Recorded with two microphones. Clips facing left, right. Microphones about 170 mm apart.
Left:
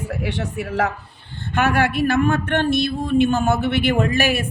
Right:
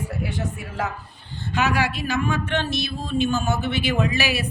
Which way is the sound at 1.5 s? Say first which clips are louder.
Left 4 dB; 55° left (ahead or behind).